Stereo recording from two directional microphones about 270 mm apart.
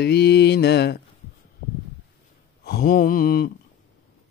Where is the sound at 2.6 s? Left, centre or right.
Left.